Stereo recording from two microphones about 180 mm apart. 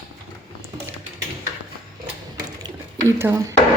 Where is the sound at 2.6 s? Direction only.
15° right (ahead or behind).